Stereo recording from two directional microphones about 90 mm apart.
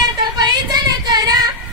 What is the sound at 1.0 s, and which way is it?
Female singing, 45° right (ahead or behind).